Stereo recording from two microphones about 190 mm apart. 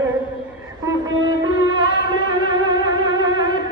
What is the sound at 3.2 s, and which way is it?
Music, 20° right (ahead or behind).